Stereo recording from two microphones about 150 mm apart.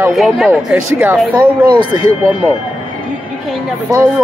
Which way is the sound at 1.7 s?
30° right (ahead or behind).